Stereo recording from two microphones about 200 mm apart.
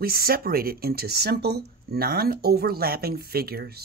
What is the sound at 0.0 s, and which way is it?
Speech, 50° right (ahead or behind).